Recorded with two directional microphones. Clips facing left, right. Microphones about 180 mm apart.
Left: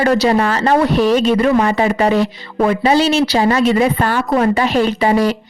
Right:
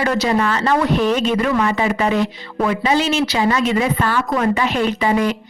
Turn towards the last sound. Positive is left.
turn(degrees=35)  # may be behind; listen again after turning